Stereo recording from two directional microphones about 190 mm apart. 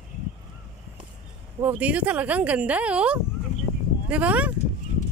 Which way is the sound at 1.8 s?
10° right (ahead or behind).